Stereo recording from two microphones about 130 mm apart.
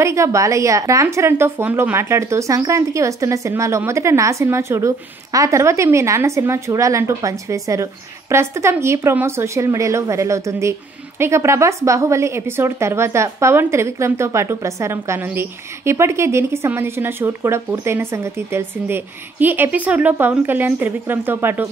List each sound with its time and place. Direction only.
0.0 s speech: 25° right (ahead or behind)